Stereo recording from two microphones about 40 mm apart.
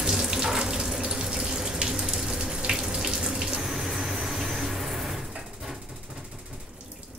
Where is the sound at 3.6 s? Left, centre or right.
Centre.